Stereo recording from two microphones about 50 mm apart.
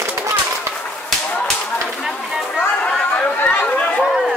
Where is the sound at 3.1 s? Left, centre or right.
Left.